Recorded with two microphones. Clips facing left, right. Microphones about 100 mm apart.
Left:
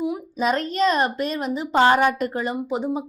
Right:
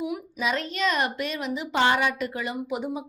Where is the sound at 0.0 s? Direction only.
35° left (ahead or behind).